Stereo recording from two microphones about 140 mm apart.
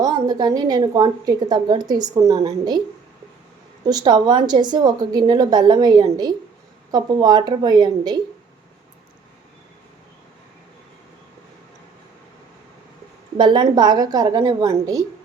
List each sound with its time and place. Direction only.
0.0 s a woman's voice: 30° right (ahead or behind)
3.8 s a woman's voice: 30° right (ahead or behind)
13.3 s a woman's voice: 30° right (ahead or behind)